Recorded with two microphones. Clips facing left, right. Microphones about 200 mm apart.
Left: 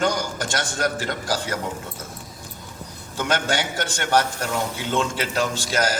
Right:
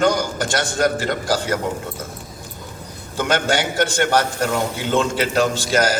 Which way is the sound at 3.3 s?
70° right (ahead or behind).